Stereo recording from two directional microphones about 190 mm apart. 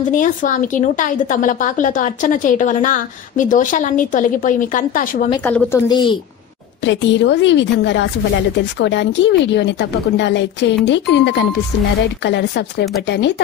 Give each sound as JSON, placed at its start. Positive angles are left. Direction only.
{"t": 0.1, "sound": "a woman's voice", "side_deg": 45}
{"t": 5.4, "sound": "a woman's voice", "side_deg": 10}
{"t": 5.9, "sound": "speech", "side_deg": 25}
{"t": 6.8, "sound": "a woman's voice", "side_deg": 70}